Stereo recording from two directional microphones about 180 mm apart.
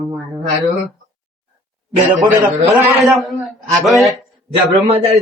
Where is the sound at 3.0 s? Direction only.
Centre (ahead or behind).